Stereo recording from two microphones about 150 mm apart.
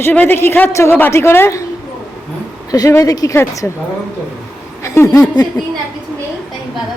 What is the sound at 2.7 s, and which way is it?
Speech, 20° left (ahead or behind).